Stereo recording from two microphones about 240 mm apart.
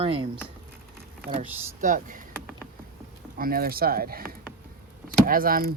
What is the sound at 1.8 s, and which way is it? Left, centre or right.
Speech, right.